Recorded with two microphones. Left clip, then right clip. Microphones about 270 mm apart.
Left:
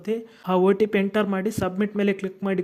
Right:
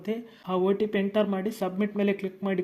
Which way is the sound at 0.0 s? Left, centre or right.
Left.